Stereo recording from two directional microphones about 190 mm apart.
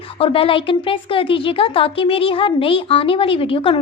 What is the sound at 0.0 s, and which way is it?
Speech, 30° left (ahead or behind).